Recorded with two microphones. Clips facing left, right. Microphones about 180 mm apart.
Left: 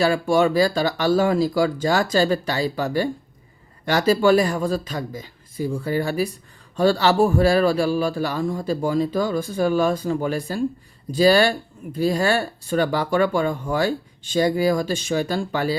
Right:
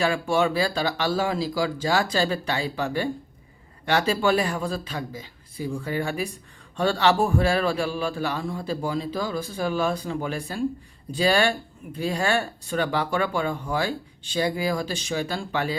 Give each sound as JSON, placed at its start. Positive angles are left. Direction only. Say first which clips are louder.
{"t": 0.0, "sound": "speech", "louder": "left 4 dB", "side_deg": 40}